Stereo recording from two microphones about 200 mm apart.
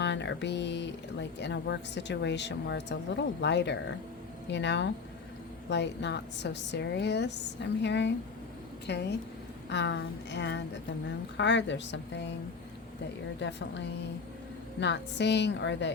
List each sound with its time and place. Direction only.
0.0 s a woman's voice: 60° left (ahead or behind)
13.4 s a woman's voice: 60° left (ahead or behind)